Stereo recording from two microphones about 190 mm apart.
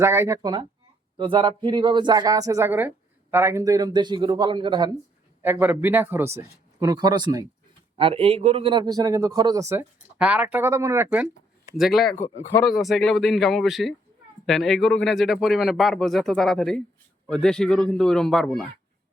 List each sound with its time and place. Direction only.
0.0 s a man's voice: 15° right (ahead or behind)
5.4 s a man's voice: 10° right (ahead or behind)